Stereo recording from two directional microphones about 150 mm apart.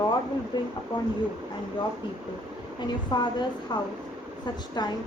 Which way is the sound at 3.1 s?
30° left (ahead or behind).